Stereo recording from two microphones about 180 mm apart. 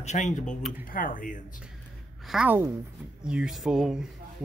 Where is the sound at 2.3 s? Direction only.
5° right (ahead or behind).